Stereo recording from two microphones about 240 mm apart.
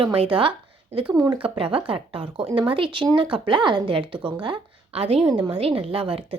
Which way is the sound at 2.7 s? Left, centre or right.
Right.